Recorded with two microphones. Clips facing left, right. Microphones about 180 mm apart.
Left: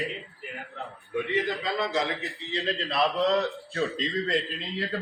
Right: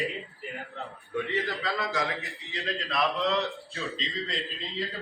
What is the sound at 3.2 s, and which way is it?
Speech, 40° left (ahead or behind).